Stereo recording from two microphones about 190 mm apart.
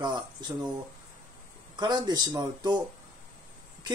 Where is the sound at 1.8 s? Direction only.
20° right (ahead or behind).